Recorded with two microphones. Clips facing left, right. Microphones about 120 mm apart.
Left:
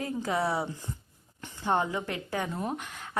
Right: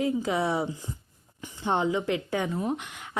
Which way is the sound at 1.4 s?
20° right (ahead or behind).